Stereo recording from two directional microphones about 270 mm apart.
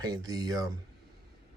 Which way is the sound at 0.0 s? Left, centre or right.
Centre.